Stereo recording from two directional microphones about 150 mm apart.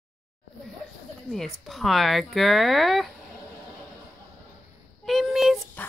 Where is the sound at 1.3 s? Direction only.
Centre (ahead or behind).